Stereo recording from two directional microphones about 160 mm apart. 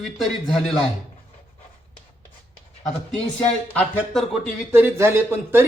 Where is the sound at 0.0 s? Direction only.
Centre (ahead or behind).